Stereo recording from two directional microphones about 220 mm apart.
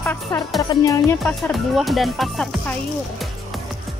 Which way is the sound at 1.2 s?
Centre (ahead or behind).